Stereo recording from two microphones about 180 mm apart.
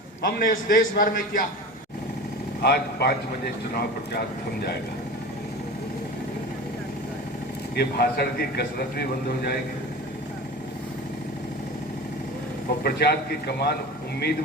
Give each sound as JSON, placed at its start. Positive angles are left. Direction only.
{"t": 0.2, "sound": "a man's voice", "side_deg": 50}
{"t": 2.6, "sound": "a man's voice", "side_deg": 60}
{"t": 7.8, "sound": "a man's voice", "side_deg": 60}
{"t": 12.8, "sound": "a man's voice", "side_deg": 65}